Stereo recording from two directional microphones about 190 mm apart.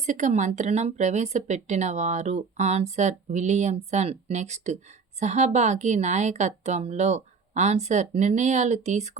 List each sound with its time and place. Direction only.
0.0 s speech: 40° right (ahead or behind)